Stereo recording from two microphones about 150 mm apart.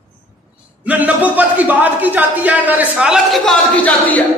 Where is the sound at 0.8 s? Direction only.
10° right (ahead or behind).